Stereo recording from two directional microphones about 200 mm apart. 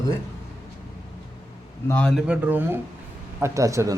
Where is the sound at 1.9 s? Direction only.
5° left (ahead or behind).